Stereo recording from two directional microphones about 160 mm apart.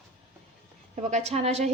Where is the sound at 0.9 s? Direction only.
40° right (ahead or behind).